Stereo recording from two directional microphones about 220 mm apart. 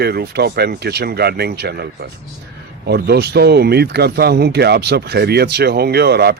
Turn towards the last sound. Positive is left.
turn(degrees=-45)  # may be behind; listen again after turning